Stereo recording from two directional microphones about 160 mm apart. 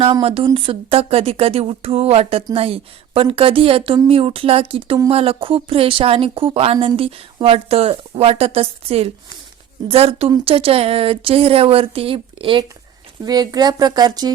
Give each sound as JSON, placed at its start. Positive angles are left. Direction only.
{"t": 0.0, "sound": "speech", "side_deg": -35}